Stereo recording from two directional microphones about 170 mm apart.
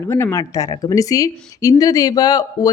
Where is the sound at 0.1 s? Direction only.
15° left (ahead or behind).